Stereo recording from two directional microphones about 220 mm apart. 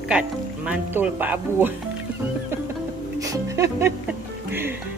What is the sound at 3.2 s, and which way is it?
Music, 15° right (ahead or behind).